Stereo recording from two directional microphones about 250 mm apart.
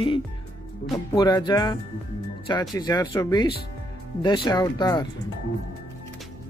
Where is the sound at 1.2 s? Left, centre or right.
Centre.